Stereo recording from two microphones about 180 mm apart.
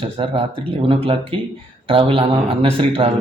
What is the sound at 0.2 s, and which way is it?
Speech, 30° right (ahead or behind).